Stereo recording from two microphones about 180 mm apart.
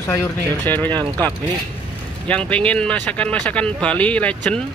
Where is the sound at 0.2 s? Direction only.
10° left (ahead or behind).